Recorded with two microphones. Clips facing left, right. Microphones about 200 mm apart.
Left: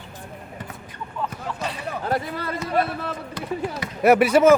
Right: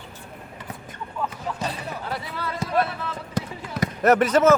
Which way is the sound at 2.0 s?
50° left (ahead or behind).